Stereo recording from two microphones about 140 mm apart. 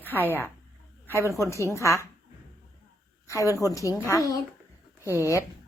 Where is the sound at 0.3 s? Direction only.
15° right (ahead or behind).